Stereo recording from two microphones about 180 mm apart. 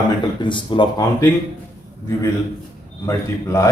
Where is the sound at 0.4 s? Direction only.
25° left (ahead or behind).